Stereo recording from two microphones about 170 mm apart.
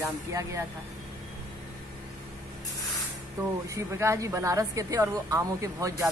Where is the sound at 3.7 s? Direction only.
15° right (ahead or behind).